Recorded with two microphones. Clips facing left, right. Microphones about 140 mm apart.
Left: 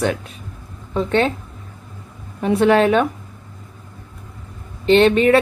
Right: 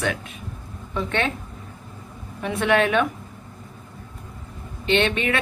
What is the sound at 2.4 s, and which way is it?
Speech, 35° left (ahead or behind).